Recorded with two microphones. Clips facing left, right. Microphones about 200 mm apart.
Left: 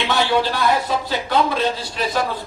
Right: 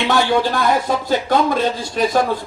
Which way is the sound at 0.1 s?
45° right (ahead or behind).